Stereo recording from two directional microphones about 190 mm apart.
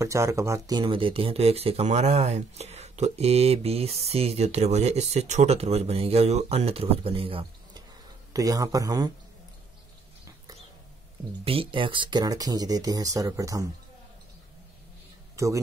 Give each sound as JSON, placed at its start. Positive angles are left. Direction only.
{"t": 0.0, "sound": "speech", "side_deg": -15}
{"t": 11.4, "sound": "speech", "side_deg": -30}
{"t": 15.3, "sound": "a man's voice", "side_deg": -15}